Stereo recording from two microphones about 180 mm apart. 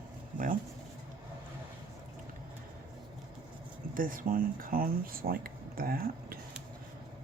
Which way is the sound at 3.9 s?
50° right (ahead or behind).